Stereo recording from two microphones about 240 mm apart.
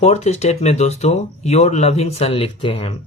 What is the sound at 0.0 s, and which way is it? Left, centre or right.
Speech, left.